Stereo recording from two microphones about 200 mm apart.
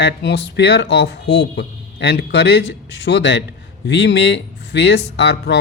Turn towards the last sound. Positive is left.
turn(degrees=60)  # may be behind; listen again after turning